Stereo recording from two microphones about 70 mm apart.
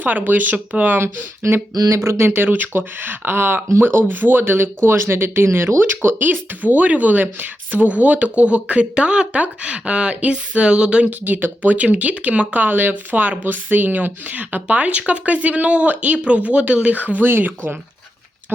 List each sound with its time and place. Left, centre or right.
0.0 s speech: right
1.7 s speech: right
2.0 s speech: right